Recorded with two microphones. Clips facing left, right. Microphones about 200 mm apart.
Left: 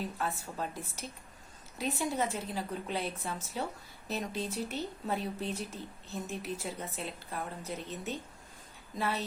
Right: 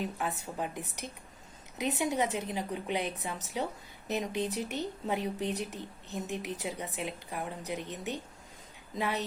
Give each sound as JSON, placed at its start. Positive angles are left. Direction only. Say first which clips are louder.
{"t": 0.2, "sound": "speech", "louder": "right 1 dB", "side_deg": -15}